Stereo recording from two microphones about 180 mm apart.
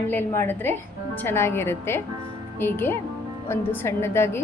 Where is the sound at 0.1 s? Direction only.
10° left (ahead or behind).